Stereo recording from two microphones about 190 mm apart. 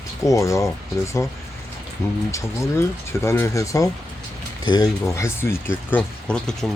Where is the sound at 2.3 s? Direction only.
15° left (ahead or behind).